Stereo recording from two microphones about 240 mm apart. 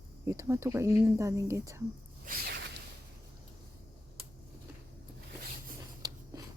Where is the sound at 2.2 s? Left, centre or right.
Right.